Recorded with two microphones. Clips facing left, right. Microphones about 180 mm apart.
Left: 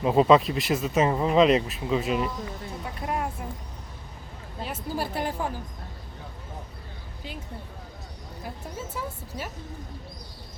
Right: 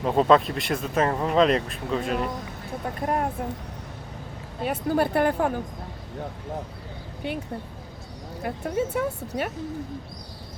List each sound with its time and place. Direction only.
0.0 s speech: 5° left (ahead or behind)
2.8 s speech: 45° right (ahead or behind)
4.6 s speech: 60° right (ahead or behind)
7.2 s speech: 65° right (ahead or behind)
8.4 s speech: 65° right (ahead or behind)